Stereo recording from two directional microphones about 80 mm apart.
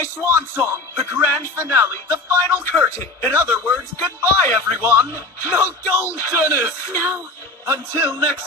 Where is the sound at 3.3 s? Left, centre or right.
Right.